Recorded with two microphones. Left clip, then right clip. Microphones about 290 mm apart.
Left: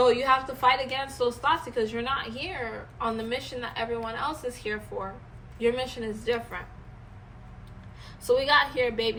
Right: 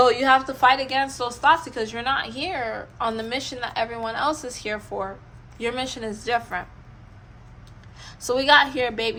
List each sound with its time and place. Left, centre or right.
0.0 s a woman's voice: right
8.4 s a woman's voice: right